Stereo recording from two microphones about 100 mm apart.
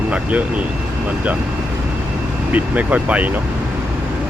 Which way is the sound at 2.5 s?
15° right (ahead or behind).